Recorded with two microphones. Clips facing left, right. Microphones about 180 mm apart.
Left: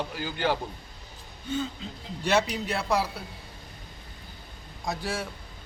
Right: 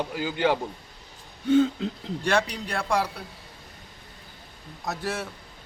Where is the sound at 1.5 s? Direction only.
75° right (ahead or behind).